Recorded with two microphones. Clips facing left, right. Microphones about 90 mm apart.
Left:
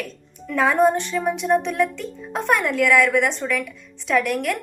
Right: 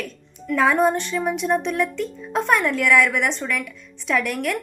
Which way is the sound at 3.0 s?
50° left (ahead or behind).